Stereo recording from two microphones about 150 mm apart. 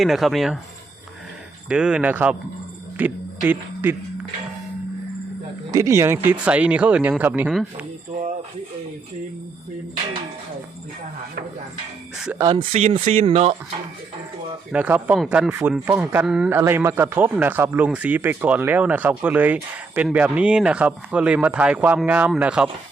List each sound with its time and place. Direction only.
0.0 s speech: centre (ahead or behind)
1.7 s speech: 5° right (ahead or behind)
5.7 s speech: 20° right (ahead or behind)
7.5 s speech: centre (ahead or behind)
12.4 s speech: 30° right (ahead or behind)
12.7 s speech: 45° right (ahead or behind)
14.7 s speech: 10° right (ahead or behind)
16.6 s speech: 15° right (ahead or behind)